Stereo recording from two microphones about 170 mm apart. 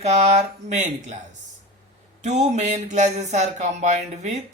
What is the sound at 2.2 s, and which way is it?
Speech, 45° right (ahead or behind).